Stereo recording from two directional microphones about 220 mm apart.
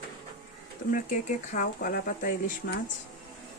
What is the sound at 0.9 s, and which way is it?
Speech, 35° left (ahead or behind).